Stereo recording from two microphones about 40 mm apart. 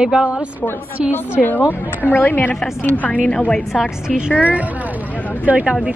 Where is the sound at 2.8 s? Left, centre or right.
Left.